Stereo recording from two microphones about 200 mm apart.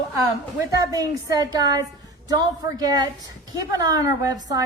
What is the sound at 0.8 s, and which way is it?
A woman's voice, 15° right (ahead or behind).